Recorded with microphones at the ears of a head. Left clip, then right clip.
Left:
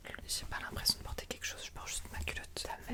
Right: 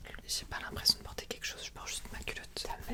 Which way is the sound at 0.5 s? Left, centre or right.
Centre.